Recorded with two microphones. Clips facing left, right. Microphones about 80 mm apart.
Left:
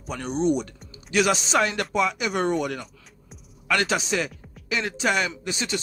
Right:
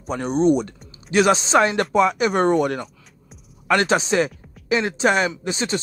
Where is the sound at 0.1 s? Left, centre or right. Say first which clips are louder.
Right 6 dB; right.